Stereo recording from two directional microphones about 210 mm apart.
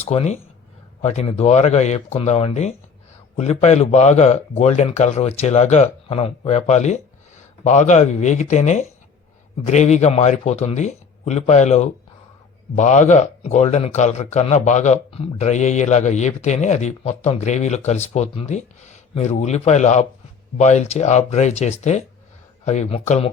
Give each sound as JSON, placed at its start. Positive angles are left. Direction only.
{"t": 0.0, "sound": "a man's voice", "side_deg": 30}